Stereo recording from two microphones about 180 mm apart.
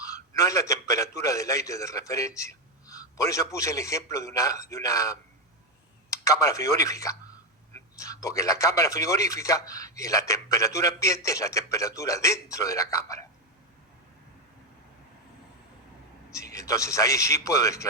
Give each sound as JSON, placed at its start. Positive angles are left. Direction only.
{"t": 0.0, "sound": "a man's voice", "side_deg": 15}
{"t": 16.3, "sound": "speech", "side_deg": 15}